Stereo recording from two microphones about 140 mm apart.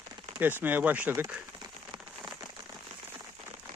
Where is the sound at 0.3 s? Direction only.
15° right (ahead or behind).